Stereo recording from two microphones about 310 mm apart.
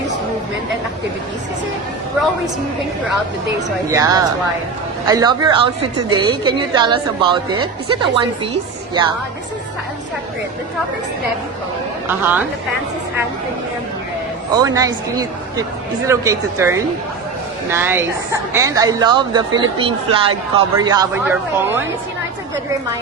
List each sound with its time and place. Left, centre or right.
3.9 s a woman's voice: centre
12.0 s a woman's voice: centre
14.5 s a woman's voice: centre